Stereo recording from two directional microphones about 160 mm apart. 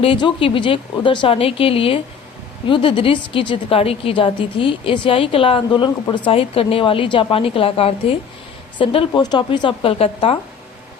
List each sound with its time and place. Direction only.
0.0 s a woman's voice: 30° left (ahead or behind)